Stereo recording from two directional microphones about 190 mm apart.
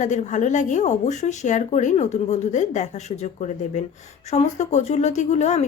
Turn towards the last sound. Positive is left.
turn(degrees=35)  # may be behind; listen again after turning